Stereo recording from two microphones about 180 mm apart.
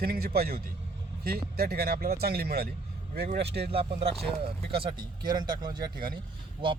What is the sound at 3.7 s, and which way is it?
Speech, 30° right (ahead or behind).